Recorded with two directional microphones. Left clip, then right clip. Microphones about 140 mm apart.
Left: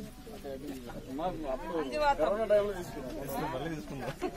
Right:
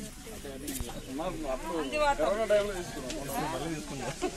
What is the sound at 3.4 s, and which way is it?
Speech, 20° left (ahead or behind).